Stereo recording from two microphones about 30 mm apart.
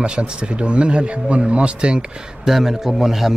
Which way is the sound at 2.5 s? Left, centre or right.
Centre.